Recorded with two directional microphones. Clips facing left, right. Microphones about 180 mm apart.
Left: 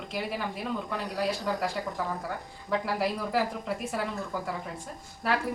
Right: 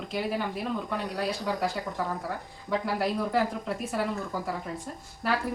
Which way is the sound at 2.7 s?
Centre (ahead or behind).